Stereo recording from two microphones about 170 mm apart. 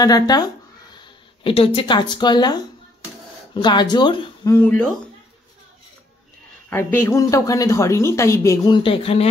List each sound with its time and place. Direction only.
0.0 s speech: 20° left (ahead or behind)
4.6 s speech: 10° left (ahead or behind)
6.7 s speech: 15° left (ahead or behind); by 9.3 s 35° left (ahead or behind)